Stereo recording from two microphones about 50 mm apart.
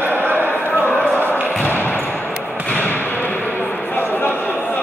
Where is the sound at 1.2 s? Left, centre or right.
Left.